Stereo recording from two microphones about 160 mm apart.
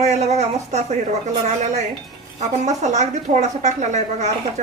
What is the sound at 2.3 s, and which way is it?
A woman's voice, 45° right (ahead or behind).